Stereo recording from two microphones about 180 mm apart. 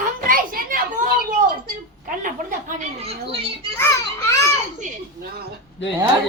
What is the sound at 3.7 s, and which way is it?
Speech, 15° left (ahead or behind).